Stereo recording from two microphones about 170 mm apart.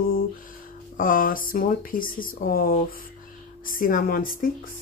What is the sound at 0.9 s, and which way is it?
Speech, 55° left (ahead or behind).